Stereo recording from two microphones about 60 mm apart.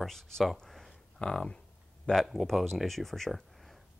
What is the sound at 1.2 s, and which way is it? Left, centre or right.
Speech, centre.